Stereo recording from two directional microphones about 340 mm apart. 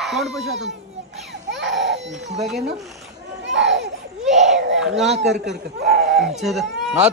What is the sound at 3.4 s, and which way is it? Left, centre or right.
Children playing, right.